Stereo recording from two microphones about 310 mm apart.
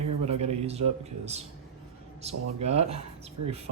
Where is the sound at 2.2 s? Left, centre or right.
Centre.